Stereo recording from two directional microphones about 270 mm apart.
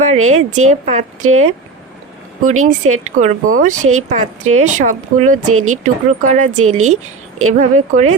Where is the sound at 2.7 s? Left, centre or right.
Right.